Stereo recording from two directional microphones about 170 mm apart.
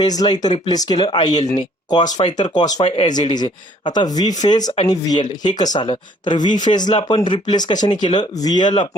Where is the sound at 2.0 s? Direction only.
45° left (ahead or behind).